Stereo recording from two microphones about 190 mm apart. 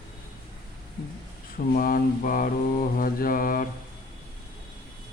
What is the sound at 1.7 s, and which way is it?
Mantra, 50° left (ahead or behind).